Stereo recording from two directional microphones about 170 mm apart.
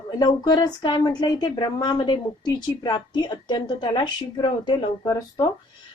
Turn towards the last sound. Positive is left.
turn(degrees=25)  # may be behind; listen again after turning